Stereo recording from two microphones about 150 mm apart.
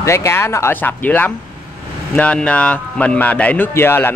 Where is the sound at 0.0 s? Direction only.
20° left (ahead or behind).